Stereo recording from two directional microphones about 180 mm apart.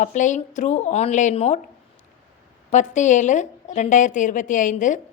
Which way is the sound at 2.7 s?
40° left (ahead or behind).